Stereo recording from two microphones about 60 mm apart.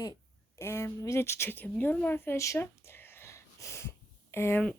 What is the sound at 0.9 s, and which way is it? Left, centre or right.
Speech, left.